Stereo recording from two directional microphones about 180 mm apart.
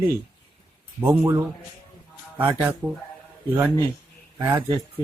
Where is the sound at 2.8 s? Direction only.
10° right (ahead or behind).